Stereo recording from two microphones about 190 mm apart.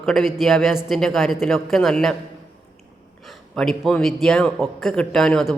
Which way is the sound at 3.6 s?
Centre (ahead or behind).